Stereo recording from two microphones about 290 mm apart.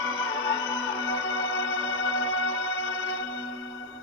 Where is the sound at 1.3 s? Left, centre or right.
Left.